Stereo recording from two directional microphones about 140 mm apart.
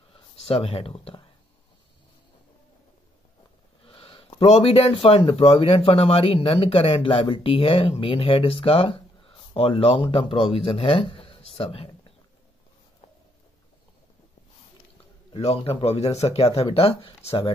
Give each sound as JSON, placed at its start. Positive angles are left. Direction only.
{"t": 0.1, "sound": "speech", "side_deg": 40}
{"t": 3.8, "sound": "speech", "side_deg": 40}
{"t": 15.3, "sound": "speech", "side_deg": 45}